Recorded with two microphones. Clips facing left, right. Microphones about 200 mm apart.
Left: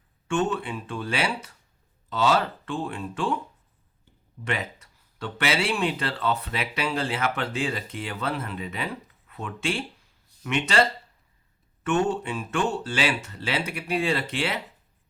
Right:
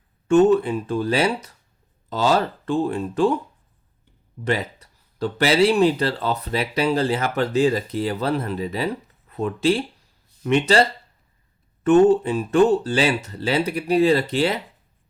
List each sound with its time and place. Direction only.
0.3 s speech: 40° right (ahead or behind)
4.4 s speech: 35° right (ahead or behind)